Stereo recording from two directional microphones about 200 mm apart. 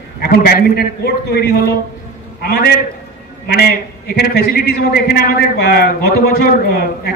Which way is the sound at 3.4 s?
50° left (ahead or behind).